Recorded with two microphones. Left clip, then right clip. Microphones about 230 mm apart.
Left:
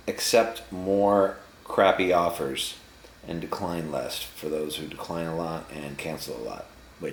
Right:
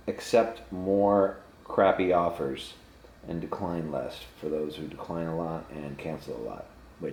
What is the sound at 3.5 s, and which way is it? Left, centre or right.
Speech, centre.